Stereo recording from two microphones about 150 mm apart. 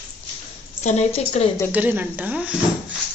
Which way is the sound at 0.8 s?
50° left (ahead or behind).